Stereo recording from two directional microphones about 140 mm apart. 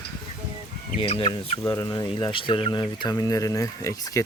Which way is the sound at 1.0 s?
40° left (ahead or behind).